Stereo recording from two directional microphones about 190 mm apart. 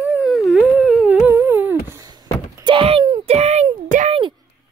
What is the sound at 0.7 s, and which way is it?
Humming, 10° right (ahead or behind).